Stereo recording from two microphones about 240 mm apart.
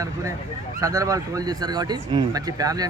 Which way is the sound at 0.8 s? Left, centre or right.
Centre.